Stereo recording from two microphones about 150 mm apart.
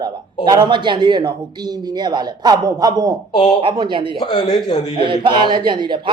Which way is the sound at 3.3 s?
35° left (ahead or behind).